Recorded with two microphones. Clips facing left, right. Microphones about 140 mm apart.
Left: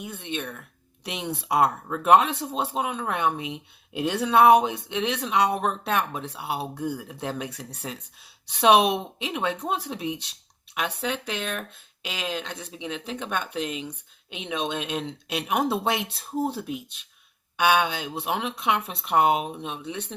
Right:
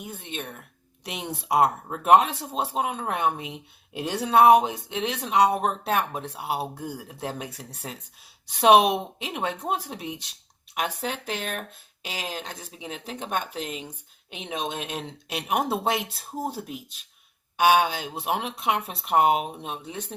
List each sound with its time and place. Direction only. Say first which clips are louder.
0.0 s speech: left 3 dB; 40° right (ahead or behind)